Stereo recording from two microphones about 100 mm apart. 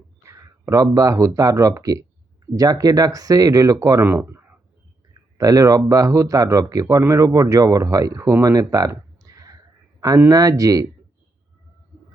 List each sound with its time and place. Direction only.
0.2 s speech: 30° right (ahead or behind)
4.0 s speech: 20° right (ahead or behind)
5.4 s speech: 35° right (ahead or behind)